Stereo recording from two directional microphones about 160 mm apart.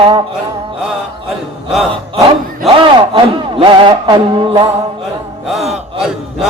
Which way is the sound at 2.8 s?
30° right (ahead or behind).